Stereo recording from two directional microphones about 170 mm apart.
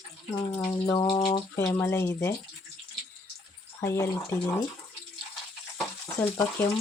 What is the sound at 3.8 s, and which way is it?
Speech, 15° left (ahead or behind).